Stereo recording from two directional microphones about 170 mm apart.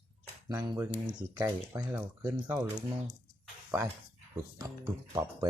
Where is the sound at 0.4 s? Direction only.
20° right (ahead or behind).